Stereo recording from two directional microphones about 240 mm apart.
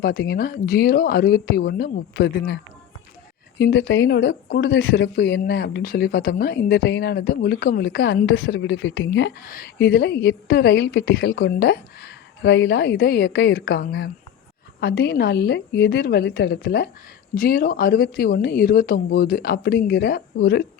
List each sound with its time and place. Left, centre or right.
0.0 s speech: left
3.6 s a woman's voice: left